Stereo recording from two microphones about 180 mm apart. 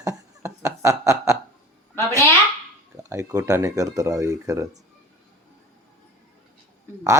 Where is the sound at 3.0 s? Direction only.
15° right (ahead or behind).